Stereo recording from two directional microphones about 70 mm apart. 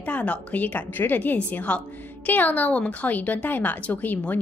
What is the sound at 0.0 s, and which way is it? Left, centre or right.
A woman's voice, centre.